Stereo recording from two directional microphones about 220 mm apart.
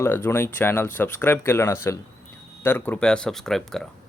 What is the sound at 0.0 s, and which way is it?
Speech, 10° left (ahead or behind).